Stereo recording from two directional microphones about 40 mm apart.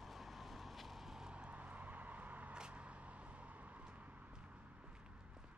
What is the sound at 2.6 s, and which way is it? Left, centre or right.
Vehicle, right.